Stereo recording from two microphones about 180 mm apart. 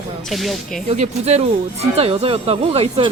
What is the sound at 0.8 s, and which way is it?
Speech, 40° right (ahead or behind).